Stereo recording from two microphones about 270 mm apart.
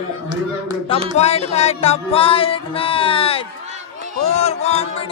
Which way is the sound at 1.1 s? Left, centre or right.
Left.